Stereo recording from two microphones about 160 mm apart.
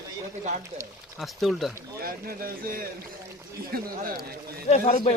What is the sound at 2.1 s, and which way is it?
Speech, 65° right (ahead or behind).